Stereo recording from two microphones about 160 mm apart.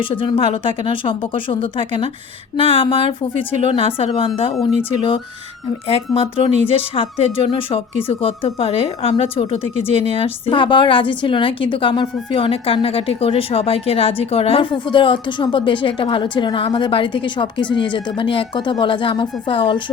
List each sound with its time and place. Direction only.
0.1 s a woman's voice: 35° left (ahead or behind)
5.9 s a woman's voice: 35° left (ahead or behind)